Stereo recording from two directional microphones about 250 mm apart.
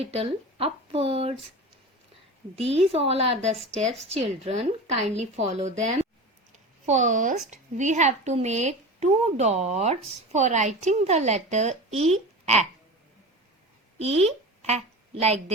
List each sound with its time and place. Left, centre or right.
0.0 s speech: right
2.6 s a woman's voice: right
6.5 s a sound: right
7.5 s a woman's voice: right
14.0 s a woman's voice: right